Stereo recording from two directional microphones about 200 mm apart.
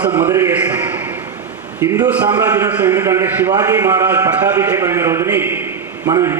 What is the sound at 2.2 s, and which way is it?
Speech, 20° right (ahead or behind).